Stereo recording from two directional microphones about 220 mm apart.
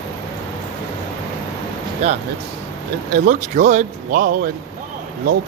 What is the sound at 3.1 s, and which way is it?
Speech, 35° right (ahead or behind).